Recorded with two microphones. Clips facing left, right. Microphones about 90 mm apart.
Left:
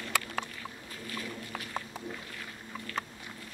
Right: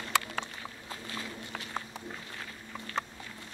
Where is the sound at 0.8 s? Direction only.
25° right (ahead or behind).